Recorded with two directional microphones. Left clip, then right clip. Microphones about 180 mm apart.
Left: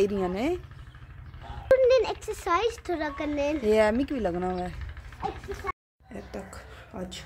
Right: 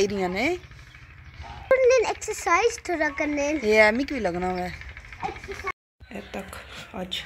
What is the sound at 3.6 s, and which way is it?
Speech, 5° right (ahead or behind).